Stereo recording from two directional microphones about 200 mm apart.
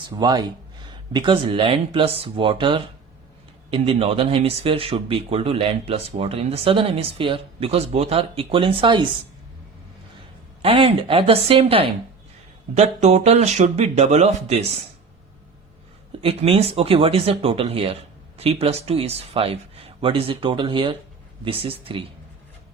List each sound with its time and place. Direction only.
0.1 s speech: 20° right (ahead or behind)
10.6 s speech: 30° right (ahead or behind)
16.2 s speech: 30° right (ahead or behind)